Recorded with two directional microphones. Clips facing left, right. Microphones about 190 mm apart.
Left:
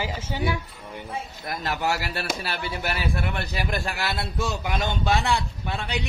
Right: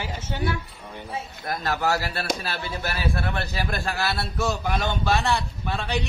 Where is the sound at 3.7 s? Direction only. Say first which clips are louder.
Right 2 dB; 15° left (ahead or behind).